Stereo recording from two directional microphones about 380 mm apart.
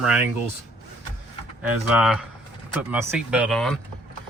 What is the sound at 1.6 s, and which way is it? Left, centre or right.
A man's voice, centre.